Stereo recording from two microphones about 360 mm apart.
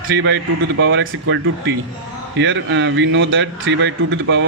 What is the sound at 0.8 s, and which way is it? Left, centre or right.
Speech, right.